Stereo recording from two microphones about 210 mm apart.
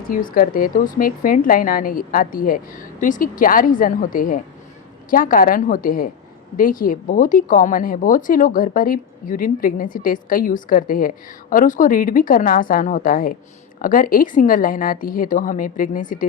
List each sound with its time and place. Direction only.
0.1 s a woman's voice: 40° left (ahead or behind)